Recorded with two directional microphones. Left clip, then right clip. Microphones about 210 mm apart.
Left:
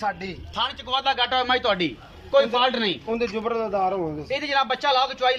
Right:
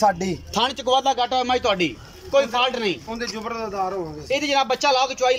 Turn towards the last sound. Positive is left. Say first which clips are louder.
# right 2 dB
turn(degrees=-10)  # may be behind; listen again after turning